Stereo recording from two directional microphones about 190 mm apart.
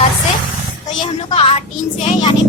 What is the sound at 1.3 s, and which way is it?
Speech, 30° left (ahead or behind).